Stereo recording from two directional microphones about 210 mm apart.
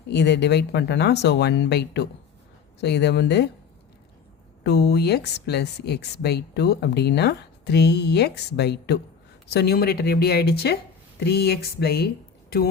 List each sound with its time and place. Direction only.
0.1 s speech: 55° left (ahead or behind)
4.6 s speech: 50° left (ahead or behind)